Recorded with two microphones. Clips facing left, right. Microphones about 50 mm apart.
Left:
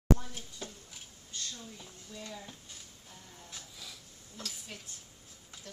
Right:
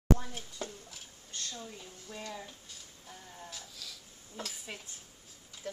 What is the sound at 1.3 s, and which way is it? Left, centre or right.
Speech, right.